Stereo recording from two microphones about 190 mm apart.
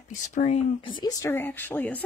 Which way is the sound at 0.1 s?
40° left (ahead or behind).